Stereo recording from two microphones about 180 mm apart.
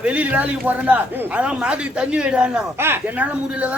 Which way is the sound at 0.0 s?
10° right (ahead or behind).